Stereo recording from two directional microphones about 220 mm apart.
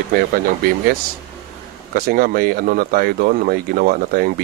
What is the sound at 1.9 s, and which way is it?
Speech, 40° right (ahead or behind).